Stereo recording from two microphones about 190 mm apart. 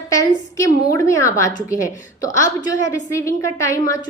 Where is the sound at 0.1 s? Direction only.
15° left (ahead or behind).